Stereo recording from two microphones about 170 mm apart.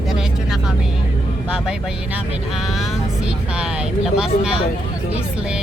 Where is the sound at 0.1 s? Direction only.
Centre (ahead or behind).